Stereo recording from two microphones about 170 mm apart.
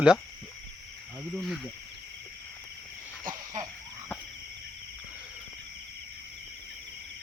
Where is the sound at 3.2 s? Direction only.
45° right (ahead or behind).